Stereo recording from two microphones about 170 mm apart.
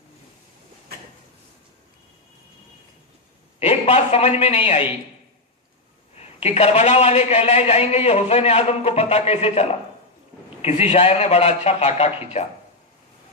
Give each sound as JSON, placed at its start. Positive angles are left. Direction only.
{"t": 3.6, "sound": "a man's voice", "side_deg": 40}
{"t": 6.1, "sound": "a man's voice", "side_deg": 40}